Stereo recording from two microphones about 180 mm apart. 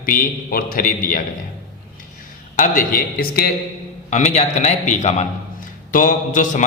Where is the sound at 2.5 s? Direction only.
45° left (ahead or behind).